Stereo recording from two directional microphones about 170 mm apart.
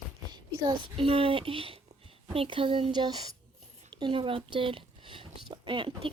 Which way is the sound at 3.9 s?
30° right (ahead or behind).